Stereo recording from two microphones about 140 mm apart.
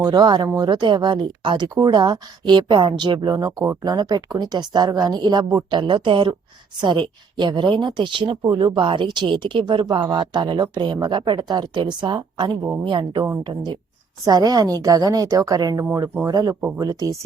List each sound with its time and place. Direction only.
0.0 s a woman's voice: 30° right (ahead or behind)
16.6 s a woman's voice: 15° right (ahead or behind)